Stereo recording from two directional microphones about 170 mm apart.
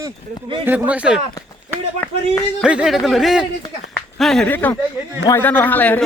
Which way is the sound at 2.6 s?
5° right (ahead or behind).